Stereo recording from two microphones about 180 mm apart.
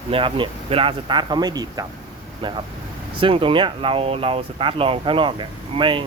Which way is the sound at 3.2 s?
30° right (ahead or behind).